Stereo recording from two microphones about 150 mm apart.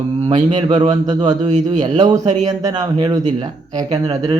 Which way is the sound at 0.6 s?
30° right (ahead or behind).